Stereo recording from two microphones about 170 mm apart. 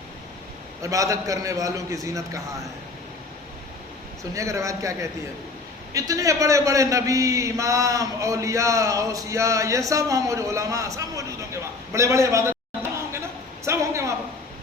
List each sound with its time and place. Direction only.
0.8 s a man's voice: 20° right (ahead or behind)
4.4 s a man's voice: 20° right (ahead or behind)
13.7 s a sound: 15° right (ahead or behind)